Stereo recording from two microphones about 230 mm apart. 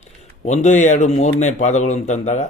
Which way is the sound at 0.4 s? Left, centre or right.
Left.